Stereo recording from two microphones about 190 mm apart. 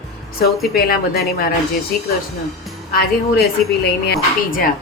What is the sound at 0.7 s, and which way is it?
Speech, 50° left (ahead or behind).